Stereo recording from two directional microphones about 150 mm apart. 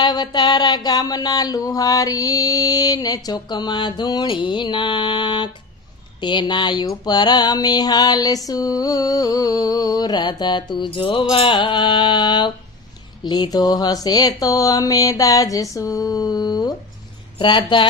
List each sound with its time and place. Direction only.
0.0 s mantra: 30° left (ahead or behind)